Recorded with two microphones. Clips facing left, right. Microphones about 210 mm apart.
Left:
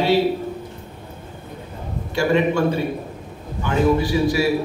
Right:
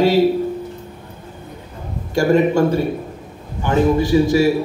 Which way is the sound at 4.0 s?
45° right (ahead or behind).